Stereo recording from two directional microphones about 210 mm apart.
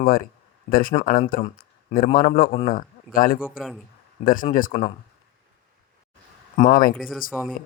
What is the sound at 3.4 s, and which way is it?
Speech, 5° right (ahead or behind).